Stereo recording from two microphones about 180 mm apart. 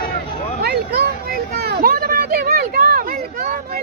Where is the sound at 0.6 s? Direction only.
65° right (ahead or behind).